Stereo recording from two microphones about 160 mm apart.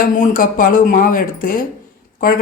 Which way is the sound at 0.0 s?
60° left (ahead or behind).